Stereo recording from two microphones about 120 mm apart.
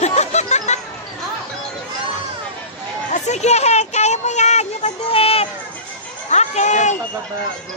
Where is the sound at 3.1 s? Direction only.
70° left (ahead or behind); by 5.4 s 55° left (ahead or behind).